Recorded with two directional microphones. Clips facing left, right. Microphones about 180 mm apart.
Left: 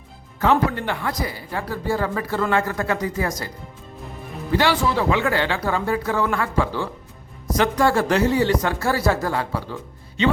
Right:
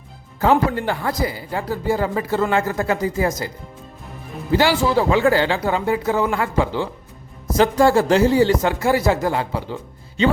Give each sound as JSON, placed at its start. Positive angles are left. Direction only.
{"t": 0.3, "sound": "speech", "side_deg": -35}
{"t": 4.8, "sound": "speech", "side_deg": -35}